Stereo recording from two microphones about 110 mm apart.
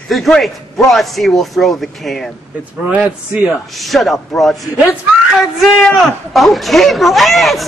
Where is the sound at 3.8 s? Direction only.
Centre (ahead or behind).